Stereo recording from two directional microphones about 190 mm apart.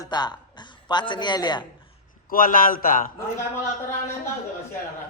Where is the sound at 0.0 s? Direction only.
20° left (ahead or behind).